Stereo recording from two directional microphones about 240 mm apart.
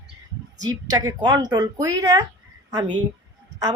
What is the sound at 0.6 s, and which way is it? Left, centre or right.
Speech, centre.